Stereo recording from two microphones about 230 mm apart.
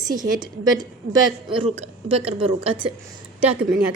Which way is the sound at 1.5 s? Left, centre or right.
Right.